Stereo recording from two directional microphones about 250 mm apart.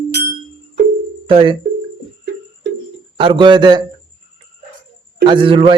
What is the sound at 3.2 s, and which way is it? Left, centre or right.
Speech, centre.